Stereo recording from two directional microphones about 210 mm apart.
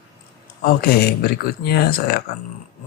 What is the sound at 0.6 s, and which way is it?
Speech, 45° left (ahead or behind).